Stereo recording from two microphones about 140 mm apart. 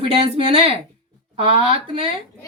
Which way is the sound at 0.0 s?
40° right (ahead or behind).